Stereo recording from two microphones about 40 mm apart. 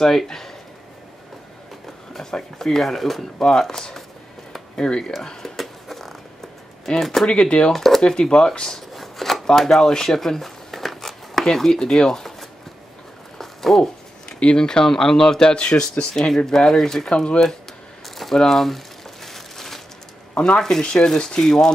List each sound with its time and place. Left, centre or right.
0.0 s speech: centre
2.3 s speech: centre
5.6 s a sound: centre
7.2 s speech: left
7.7 s speech: centre
8.0 s speech: left
8.5 s a sound: centre
11.8 s speech: centre
13.4 s a sound: centre
14.4 s speech: left
18.0 s a sound: centre
18.4 s speech: centre
19.2 s crumpling: centre
20.3 s speech: centre